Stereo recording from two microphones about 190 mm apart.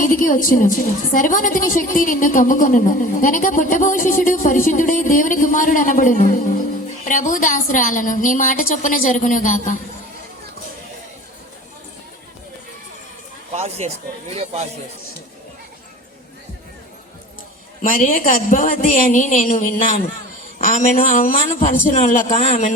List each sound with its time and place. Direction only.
0.0 s a woman's voice: 45° left (ahead or behind)
13.5 s speech: 35° right (ahead or behind)
17.8 s a woman's voice: 45° left (ahead or behind)